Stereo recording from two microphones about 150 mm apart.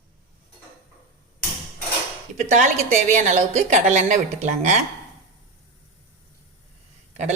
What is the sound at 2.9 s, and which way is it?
A woman's voice, 50° right (ahead or behind).